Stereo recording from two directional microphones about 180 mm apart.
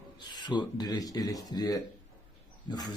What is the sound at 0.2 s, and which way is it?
Speech, 25° left (ahead or behind).